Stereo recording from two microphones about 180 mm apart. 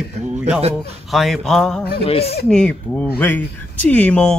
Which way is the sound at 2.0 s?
35° left (ahead or behind).